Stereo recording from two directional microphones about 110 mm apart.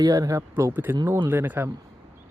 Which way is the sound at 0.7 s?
15° right (ahead or behind).